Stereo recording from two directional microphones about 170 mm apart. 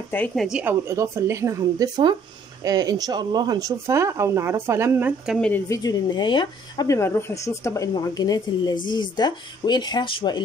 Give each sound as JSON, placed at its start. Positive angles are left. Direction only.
{"t": 0.1, "sound": "speech", "side_deg": 10}
{"t": 0.5, "sound": "speech", "side_deg": -10}
{"t": 5.5, "sound": "speech", "side_deg": 20}